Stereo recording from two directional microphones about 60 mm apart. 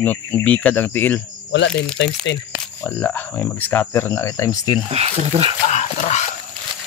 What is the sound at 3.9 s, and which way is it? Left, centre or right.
Speech, left.